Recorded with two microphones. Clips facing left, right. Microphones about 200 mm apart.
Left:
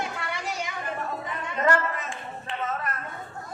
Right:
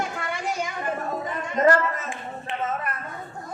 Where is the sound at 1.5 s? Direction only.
40° right (ahead or behind).